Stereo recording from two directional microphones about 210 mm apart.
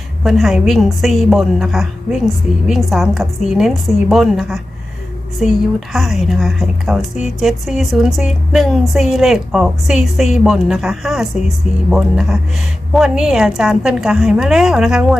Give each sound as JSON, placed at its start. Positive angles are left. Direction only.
{"t": 0.2, "sound": "a woman's voice", "side_deg": 0}